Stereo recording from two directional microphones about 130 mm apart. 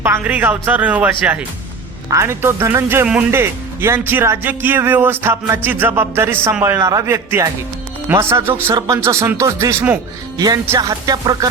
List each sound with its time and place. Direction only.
0.0 s speech: 15° right (ahead or behind)
2.0 s speech: 20° right (ahead or behind)
10.3 s speech: 30° right (ahead or behind)